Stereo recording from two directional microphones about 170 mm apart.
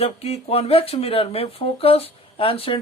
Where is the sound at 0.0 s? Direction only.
35° left (ahead or behind).